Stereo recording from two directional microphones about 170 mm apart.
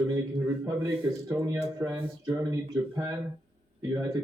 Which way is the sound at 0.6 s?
15° right (ahead or behind).